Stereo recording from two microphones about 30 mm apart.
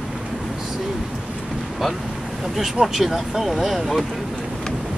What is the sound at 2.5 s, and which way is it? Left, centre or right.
Speech, centre.